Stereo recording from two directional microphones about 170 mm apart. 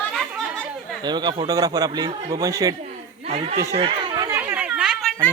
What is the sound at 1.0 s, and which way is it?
Speech, 25° right (ahead or behind).